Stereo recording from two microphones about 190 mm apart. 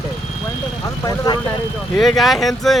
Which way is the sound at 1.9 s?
Centre (ahead or behind).